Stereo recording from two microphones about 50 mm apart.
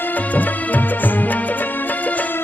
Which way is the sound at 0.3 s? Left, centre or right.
Left.